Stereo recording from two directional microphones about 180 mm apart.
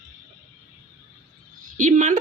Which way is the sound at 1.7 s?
45° right (ahead or behind).